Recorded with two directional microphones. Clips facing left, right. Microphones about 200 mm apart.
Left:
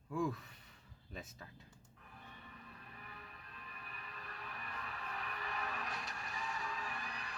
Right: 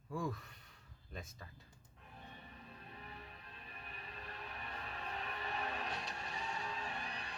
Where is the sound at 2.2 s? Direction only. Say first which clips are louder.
Right 1 dB; 30° right (ahead or behind).